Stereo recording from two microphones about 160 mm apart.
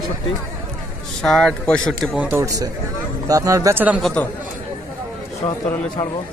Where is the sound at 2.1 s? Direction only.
15° right (ahead or behind).